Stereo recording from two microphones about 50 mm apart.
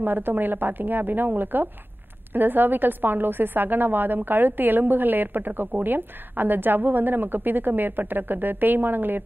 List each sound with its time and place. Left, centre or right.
0.0 s a woman's voice: right